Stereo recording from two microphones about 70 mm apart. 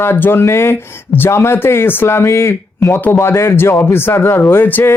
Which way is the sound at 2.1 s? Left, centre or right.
Left.